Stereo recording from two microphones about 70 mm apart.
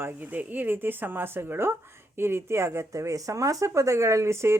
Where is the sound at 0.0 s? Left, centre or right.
Right.